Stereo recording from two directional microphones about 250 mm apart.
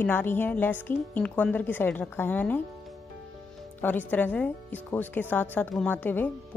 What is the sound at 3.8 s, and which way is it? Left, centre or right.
Speech, centre.